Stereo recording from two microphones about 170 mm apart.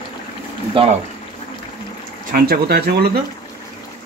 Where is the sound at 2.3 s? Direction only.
60° right (ahead or behind).